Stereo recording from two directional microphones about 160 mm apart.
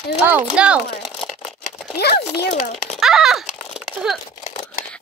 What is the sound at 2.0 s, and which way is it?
Speech, 90° left.